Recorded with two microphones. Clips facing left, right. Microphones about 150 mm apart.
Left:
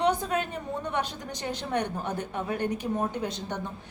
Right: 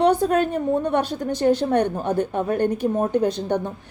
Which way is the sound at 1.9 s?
30° right (ahead or behind).